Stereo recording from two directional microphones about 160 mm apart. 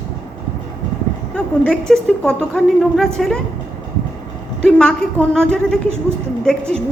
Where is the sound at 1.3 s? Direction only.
5° left (ahead or behind).